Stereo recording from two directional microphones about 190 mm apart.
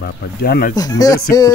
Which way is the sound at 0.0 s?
55° left (ahead or behind).